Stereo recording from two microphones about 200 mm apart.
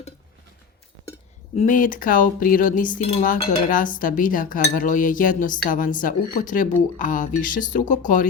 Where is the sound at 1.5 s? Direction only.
40° left (ahead or behind).